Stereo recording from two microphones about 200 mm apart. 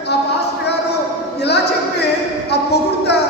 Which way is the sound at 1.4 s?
55° left (ahead or behind).